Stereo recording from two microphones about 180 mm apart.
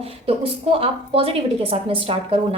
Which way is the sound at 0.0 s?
30° right (ahead or behind).